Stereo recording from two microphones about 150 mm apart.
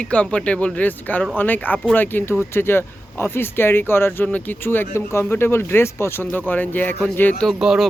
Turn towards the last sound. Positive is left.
turn(degrees=0)  # may be behind; listen again after turning